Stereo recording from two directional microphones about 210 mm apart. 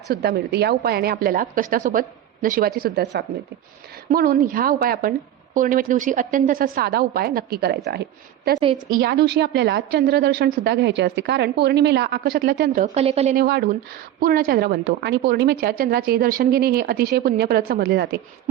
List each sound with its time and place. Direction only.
0.1 s a woman's voice: 50° right (ahead or behind)
8.9 s a woman's voice: 50° right (ahead or behind); by 13.3 s 30° right (ahead or behind)
13.3 s a woman's voice: 45° right (ahead or behind)